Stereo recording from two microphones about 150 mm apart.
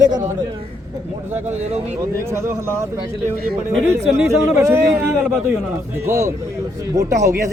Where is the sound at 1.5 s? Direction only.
45° right (ahead or behind).